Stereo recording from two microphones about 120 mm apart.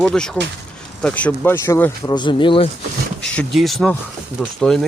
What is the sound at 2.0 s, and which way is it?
Speech, 40° left (ahead or behind).